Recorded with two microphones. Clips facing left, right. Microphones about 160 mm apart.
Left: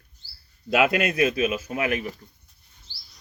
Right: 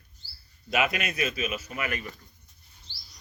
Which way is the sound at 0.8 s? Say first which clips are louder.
Left 7 dB; 60° left (ahead or behind).